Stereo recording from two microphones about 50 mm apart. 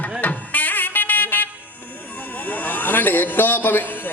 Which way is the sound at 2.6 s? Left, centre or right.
Left.